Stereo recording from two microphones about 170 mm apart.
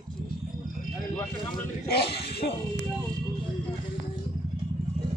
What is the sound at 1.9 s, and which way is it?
Speech, 70° left (ahead or behind).